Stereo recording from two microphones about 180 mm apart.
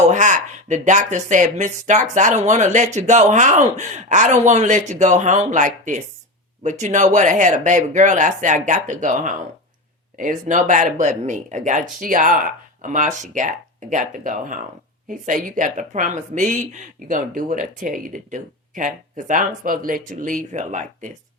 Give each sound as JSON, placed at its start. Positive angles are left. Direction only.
{"t": 0.1, "sound": "speech", "side_deg": -40}